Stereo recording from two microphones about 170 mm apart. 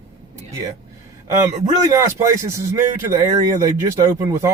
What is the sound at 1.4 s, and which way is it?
Speech, 15° right (ahead or behind).